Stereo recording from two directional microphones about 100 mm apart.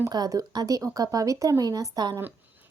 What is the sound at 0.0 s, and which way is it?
A woman's voice, 35° right (ahead or behind).